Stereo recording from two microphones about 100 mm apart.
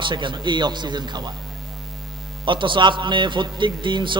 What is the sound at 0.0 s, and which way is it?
A man's voice, 50° right (ahead or behind).